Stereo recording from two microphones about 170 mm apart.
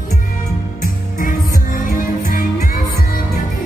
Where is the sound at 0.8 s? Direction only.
55° left (ahead or behind).